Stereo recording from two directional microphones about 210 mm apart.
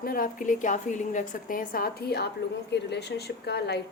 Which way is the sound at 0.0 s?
45° left (ahead or behind).